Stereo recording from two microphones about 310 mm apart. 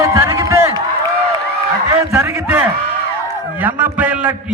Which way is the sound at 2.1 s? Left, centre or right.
Centre.